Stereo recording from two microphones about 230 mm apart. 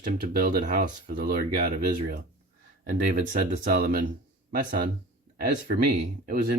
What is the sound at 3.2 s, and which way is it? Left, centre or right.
Speech, right.